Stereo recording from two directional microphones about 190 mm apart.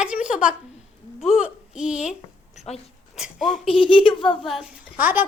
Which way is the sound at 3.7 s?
25° left (ahead or behind).